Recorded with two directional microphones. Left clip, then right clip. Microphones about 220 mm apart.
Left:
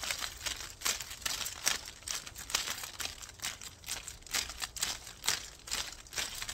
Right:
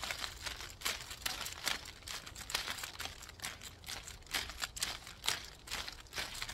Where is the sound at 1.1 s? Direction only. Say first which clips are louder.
Left 3 dB; 20° left (ahead or behind).